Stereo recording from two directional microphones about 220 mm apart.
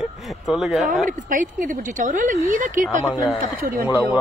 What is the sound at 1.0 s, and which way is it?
Speech, 35° right (ahead or behind).